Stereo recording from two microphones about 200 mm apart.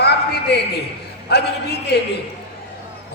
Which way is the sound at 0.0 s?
55° left (ahead or behind).